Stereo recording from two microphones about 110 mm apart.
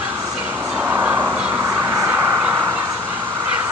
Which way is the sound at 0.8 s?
15° right (ahead or behind).